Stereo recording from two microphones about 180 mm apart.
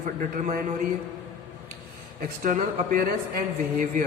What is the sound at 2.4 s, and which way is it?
Speech, 50° right (ahead or behind).